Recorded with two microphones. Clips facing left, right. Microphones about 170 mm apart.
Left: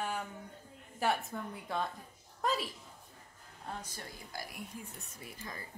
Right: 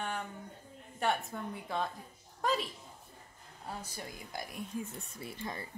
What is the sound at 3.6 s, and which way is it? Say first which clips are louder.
Speech: right 1 dB; 10° right (ahead or behind).